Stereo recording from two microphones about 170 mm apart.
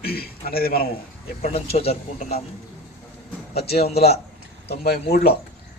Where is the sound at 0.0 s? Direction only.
65° left (ahead or behind).